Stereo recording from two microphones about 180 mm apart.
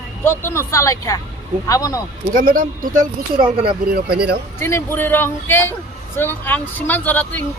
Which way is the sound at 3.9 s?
60° right (ahead or behind).